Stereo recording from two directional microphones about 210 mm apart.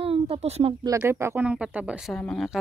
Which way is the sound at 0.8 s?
15° right (ahead or behind).